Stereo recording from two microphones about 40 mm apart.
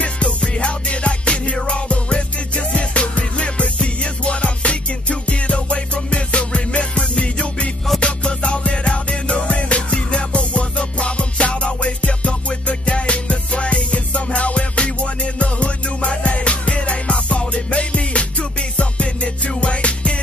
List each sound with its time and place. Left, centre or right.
0.0 s music: left